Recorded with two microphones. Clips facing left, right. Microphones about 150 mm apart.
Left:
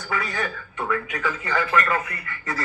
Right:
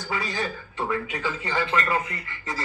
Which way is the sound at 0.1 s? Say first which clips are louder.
Left 2 dB; 25° right (ahead or behind).